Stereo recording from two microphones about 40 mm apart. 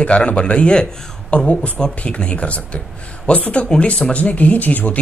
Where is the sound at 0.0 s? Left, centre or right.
Left.